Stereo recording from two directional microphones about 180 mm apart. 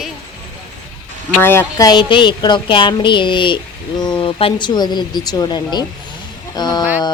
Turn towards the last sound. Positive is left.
turn(degrees=25)  # may be behind; listen again after turning